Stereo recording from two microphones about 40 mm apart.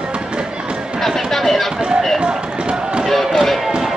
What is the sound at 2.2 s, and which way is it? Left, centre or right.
Run, right.